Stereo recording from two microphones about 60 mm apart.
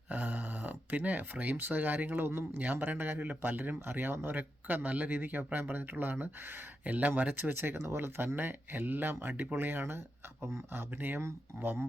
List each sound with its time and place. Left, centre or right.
0.1 s speech: right